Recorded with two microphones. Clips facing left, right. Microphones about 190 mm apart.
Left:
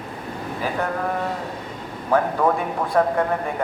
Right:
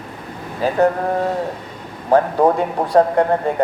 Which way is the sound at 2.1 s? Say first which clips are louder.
Right 5 dB; 35° right (ahead or behind).